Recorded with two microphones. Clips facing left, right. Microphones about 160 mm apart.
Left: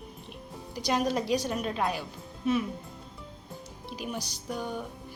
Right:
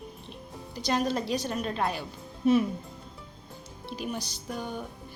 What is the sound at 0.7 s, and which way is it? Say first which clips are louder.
A woman's voice: even; 10° left (ahead or behind).